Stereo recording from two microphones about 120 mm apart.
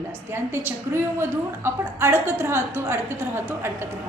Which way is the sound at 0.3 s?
20° right (ahead or behind).